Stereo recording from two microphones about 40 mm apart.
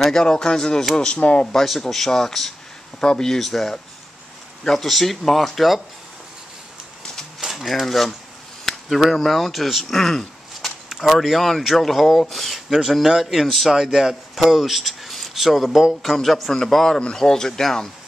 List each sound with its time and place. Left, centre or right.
0.0 s speech: centre; by 1.5 s left
1.5 s speech: centre
7.3 s a sound: centre
7.8 s speech: centre
9.9 s speech: centre
10.6 s a sound: centre
11.6 s speech: centre